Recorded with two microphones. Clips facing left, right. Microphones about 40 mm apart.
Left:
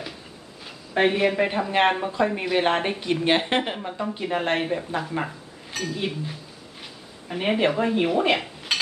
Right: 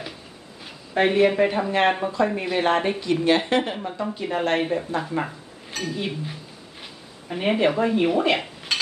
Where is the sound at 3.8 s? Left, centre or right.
Centre.